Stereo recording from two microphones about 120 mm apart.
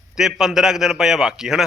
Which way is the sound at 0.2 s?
5° right (ahead or behind).